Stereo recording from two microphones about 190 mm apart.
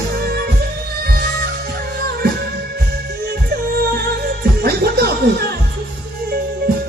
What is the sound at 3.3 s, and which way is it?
Music, 55° right (ahead or behind).